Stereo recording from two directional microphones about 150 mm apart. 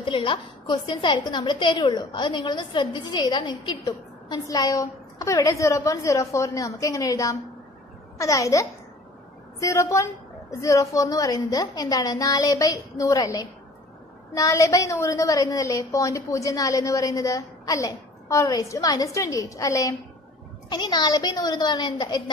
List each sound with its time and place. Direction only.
0.0 s a woman's voice: 35° left (ahead or behind)